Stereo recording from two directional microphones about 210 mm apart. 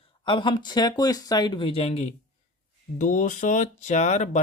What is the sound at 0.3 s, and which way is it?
Speech, 25° left (ahead or behind).